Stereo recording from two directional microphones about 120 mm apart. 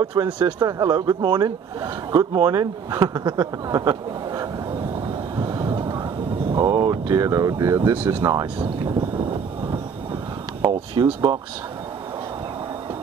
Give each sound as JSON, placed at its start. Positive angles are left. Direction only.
{"t": 0.0, "sound": "speech", "side_deg": -40}
{"t": 5.4, "sound": "vehicle", "side_deg": -30}
{"t": 6.5, "sound": "speech", "side_deg": -40}
{"t": 7.9, "sound": "speech", "side_deg": -20}
{"t": 8.3, "sound": "speech", "side_deg": -35}
{"t": 10.6, "sound": "a sound", "side_deg": -45}
{"t": 11.3, "sound": "speech", "side_deg": -45}